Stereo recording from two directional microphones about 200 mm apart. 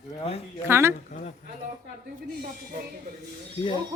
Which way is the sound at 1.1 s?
40° left (ahead or behind).